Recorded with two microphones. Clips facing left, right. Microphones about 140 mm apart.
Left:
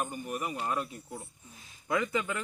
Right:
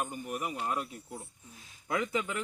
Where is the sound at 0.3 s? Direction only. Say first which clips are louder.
Left 1 dB; 10° right (ahead or behind).